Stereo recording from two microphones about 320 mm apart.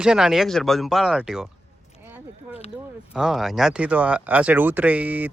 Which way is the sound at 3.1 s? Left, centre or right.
Centre.